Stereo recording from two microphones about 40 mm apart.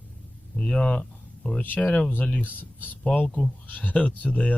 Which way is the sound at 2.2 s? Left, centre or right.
Left.